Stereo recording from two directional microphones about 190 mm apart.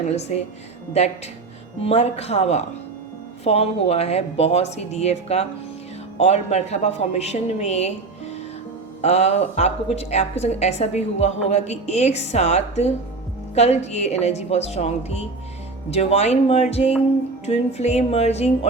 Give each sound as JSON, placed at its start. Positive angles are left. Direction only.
{"t": 0.2, "sound": "speech", "side_deg": 35}
{"t": 9.0, "sound": "speech", "side_deg": 35}